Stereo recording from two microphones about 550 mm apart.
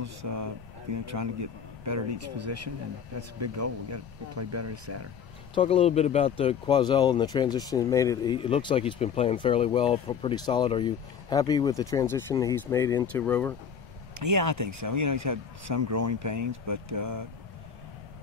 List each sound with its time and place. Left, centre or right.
0.0 s speech: right
5.5 s speech: centre
14.1 s speech: right